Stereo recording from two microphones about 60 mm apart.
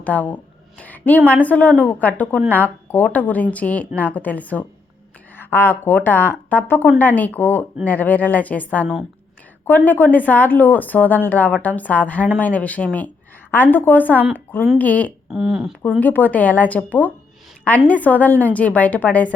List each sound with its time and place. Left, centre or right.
0.0 s a woman's voice: left
15.3 s speech: centre
16.0 s speech: left